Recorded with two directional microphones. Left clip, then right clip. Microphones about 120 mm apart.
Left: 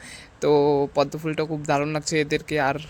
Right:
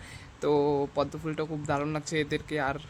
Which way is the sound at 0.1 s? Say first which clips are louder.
Left 7 dB; 30° left (ahead or behind).